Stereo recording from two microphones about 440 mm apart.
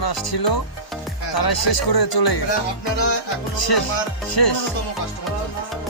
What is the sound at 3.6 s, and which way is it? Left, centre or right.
Music, left.